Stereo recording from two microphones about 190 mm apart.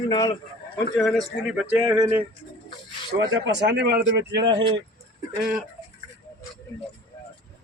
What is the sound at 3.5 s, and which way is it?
Speech, 65° right (ahead or behind).